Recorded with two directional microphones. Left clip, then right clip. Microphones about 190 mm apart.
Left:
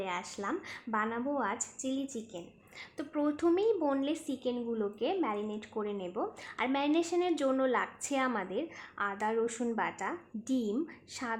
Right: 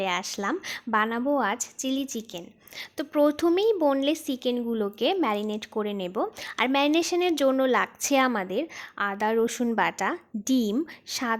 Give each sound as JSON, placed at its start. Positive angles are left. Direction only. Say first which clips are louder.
{"t": 0.0, "sound": "a woman's voice", "louder": "right 9 dB", "side_deg": -40}